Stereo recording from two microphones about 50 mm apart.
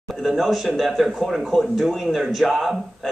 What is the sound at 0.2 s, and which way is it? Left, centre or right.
A man's voice, centre.